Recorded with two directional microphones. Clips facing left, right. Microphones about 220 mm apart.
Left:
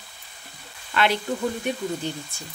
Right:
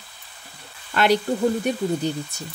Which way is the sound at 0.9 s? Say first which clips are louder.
Right 4 dB; 40° right (ahead or behind).